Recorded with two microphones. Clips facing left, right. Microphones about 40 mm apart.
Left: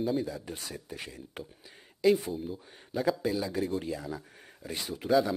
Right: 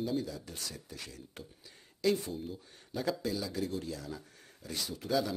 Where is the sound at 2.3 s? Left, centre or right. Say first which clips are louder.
Left 4 dB; centre; by 5.1 s left.